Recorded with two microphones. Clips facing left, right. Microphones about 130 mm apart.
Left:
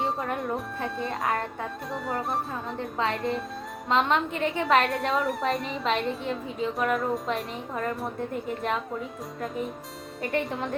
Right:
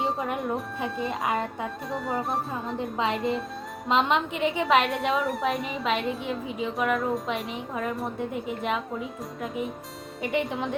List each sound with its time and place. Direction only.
0.3 s a woman's voice: centre (ahead or behind)